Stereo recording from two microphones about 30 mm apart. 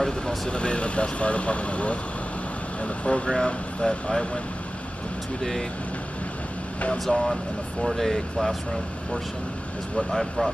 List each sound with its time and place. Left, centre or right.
0.5 s speech: left
3.8 s speech: left
7.1 s speech: left
7.8 s speech: centre
9.9 s speech: centre